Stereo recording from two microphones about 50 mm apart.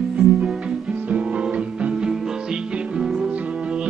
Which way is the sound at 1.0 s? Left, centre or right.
Right.